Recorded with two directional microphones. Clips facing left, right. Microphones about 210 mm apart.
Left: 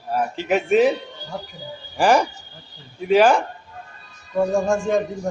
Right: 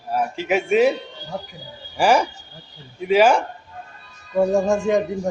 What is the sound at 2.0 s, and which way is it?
A man's voice, 10° right (ahead or behind).